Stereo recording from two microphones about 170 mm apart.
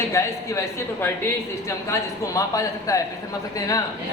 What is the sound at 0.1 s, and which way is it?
A man's voice, 15° left (ahead or behind).